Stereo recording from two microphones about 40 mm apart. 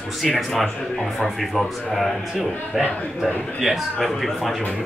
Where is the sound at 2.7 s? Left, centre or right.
Centre.